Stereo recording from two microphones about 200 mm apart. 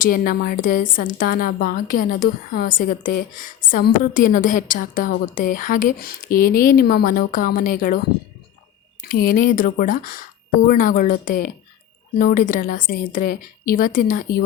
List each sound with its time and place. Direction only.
0.0 s a woman's voice: 45° left (ahead or behind)
9.0 s a woman's voice: 45° left (ahead or behind)